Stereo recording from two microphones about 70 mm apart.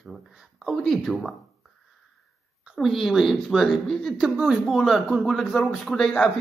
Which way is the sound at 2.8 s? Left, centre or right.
Centre.